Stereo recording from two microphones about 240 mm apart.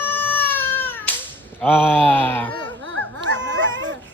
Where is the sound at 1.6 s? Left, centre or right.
Centre.